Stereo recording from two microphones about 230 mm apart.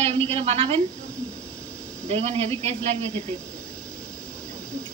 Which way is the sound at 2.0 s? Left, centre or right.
Right.